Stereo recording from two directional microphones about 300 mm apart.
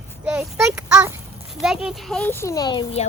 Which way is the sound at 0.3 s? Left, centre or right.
Centre.